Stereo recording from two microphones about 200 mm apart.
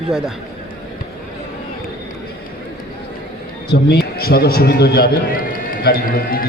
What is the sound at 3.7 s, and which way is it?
A man's voice, 55° left (ahead or behind).